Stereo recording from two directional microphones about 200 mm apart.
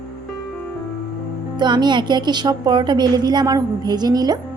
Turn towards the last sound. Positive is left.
turn(degrees=-20)  # may be behind; listen again after turning